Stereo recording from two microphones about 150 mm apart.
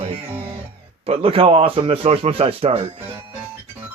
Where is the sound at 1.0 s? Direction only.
40° right (ahead or behind).